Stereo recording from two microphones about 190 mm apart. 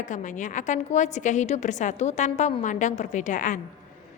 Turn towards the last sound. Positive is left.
turn(degrees=45)  # may be behind; listen again after turning